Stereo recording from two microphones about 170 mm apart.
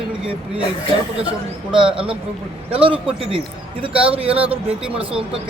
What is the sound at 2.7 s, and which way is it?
A man's voice, 30° right (ahead or behind).